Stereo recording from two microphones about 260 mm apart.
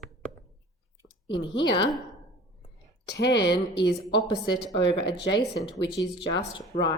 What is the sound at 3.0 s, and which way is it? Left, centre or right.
Speech, left.